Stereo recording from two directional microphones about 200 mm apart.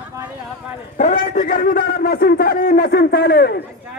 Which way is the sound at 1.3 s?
45° left (ahead or behind).